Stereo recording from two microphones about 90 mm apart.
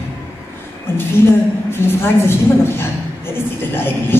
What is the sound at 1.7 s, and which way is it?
A woman's voice, 25° left (ahead or behind).